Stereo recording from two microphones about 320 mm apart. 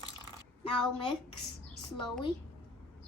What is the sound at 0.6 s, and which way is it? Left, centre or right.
Speech, centre.